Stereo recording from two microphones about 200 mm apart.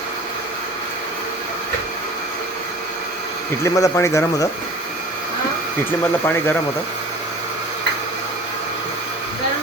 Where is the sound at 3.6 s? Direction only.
15° left (ahead or behind).